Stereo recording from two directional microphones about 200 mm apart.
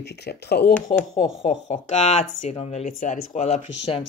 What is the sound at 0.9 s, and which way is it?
Speech, 35° left (ahead or behind).